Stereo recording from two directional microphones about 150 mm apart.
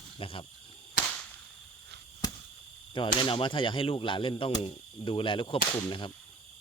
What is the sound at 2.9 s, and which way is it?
Whip, 30° left (ahead or behind).